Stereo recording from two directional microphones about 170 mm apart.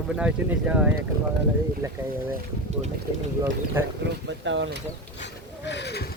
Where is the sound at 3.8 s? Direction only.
15° right (ahead or behind).